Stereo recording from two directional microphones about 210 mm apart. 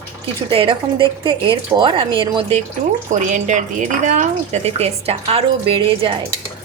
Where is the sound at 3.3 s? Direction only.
35° right (ahead or behind).